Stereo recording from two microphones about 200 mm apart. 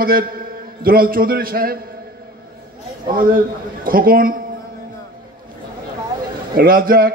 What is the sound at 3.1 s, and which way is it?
A man's voice, 45° right (ahead or behind).